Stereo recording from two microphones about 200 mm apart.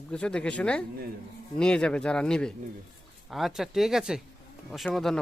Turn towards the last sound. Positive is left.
turn(degrees=5)  # may be behind; listen again after turning